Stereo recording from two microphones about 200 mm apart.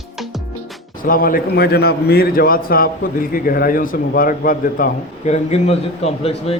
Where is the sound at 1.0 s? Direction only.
45° left (ahead or behind).